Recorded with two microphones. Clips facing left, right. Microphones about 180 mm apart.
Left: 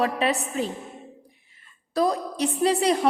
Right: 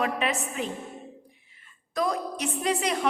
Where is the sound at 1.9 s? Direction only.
35° left (ahead or behind).